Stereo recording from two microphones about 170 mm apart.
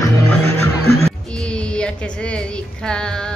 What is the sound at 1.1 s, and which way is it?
Music, 5° left (ahead or behind).